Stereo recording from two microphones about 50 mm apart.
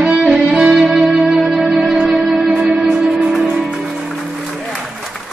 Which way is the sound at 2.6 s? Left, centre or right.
Right.